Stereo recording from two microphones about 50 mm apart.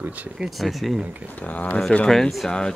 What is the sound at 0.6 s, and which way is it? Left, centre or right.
Speech, centre.